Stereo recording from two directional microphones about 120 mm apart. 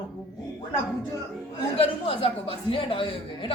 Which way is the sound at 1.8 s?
50° left (ahead or behind).